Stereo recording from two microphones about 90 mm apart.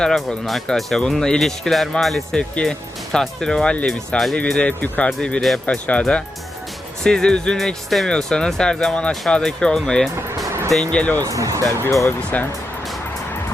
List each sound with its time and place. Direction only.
0.0 s speech: 5° left (ahead or behind)
10.5 s music: 30° right (ahead or behind)
10.8 s speech: 15° left (ahead or behind)
11.2 s speech: 40° right (ahead or behind)
11.9 s speech: 35° left (ahead or behind)
12.3 s speech: 15° left (ahead or behind)